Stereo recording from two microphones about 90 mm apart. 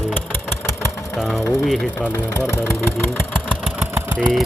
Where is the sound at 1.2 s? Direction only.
Centre (ahead or behind).